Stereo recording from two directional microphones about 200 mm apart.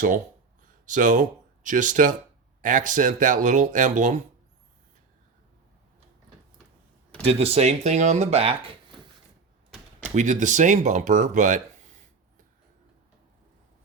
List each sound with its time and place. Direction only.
0.9 s speech: 40° right (ahead or behind)
7.3 s speech: 30° right (ahead or behind)
10.2 s speech: 35° right (ahead or behind)